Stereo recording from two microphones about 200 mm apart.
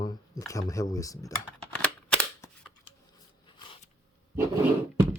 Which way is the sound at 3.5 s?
25° left (ahead or behind).